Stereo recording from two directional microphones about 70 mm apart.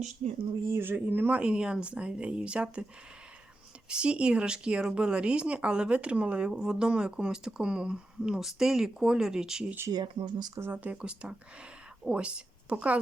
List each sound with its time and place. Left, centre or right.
0.7 s speech: right
1.4 s speech: centre
3.8 s speech: centre
9.9 s speech: right
10.6 s a woman's voice: right